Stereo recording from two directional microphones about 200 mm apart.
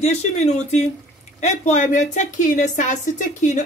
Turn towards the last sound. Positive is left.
turn(degrees=40)  # may be behind; listen again after turning